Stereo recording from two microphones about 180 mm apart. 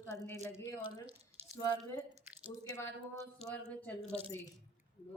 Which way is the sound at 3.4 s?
5° left (ahead or behind).